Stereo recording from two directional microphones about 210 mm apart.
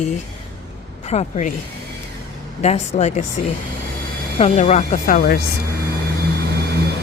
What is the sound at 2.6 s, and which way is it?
Speech, 30° left (ahead or behind).